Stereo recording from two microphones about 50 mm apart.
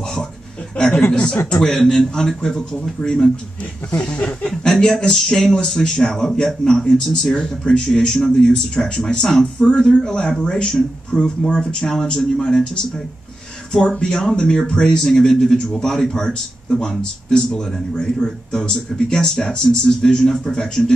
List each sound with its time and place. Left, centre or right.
1.5 s speech: centre
13.7 s speech: centre